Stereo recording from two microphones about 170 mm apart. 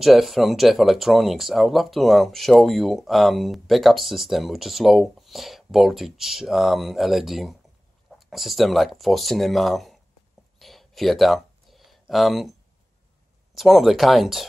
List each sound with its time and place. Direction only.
0.0 s speech: centre (ahead or behind)
10.6 s a sound: centre (ahead or behind)
13.6 s speech: centre (ahead or behind)